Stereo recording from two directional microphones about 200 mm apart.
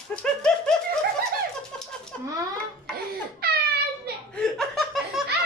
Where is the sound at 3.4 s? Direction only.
50° right (ahead or behind).